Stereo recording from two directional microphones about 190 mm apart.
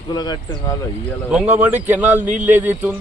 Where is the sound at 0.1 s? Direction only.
20° left (ahead or behind).